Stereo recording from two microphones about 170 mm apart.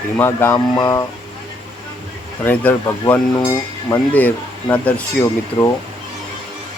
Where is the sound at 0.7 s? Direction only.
25° left (ahead or behind).